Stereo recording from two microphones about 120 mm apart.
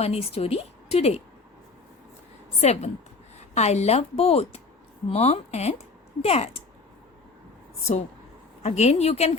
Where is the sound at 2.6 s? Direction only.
65° left (ahead or behind).